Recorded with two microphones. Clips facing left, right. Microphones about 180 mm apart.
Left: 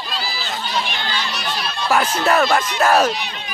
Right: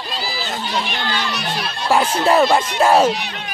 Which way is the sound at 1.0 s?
60° right (ahead or behind).